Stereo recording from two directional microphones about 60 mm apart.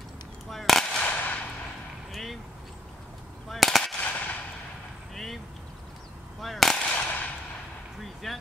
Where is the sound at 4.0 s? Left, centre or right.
Left.